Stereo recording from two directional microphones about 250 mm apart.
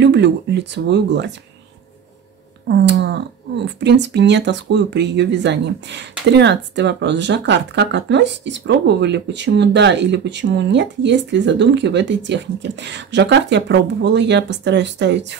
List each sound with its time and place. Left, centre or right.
0.0 s speech: right
2.7 s speech: right